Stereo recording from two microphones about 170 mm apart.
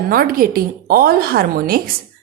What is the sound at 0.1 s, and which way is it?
A woman's voice, 60° right (ahead or behind).